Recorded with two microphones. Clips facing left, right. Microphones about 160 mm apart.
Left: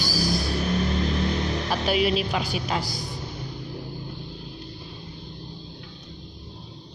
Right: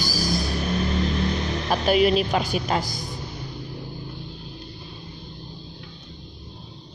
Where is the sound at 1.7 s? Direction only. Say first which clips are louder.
Right 5 dB; 45° right (ahead or behind).